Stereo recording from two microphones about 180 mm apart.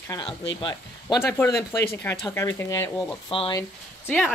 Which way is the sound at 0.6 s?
25° left (ahead or behind).